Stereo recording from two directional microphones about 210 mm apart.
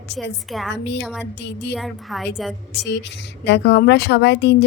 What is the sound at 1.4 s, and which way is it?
Speech, 55° left (ahead or behind).